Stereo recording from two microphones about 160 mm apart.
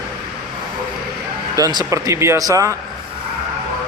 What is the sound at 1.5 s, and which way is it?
A man's voice, 20° right (ahead or behind).